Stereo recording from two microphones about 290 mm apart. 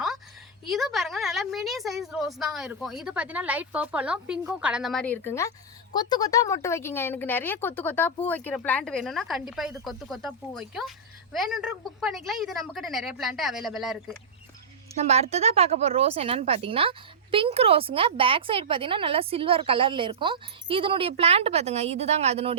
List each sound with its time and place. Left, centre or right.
0.7 s a woman's voice: centre
14.9 s speech: right